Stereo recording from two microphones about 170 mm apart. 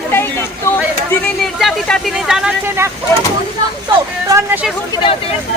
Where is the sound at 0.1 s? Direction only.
15° left (ahead or behind).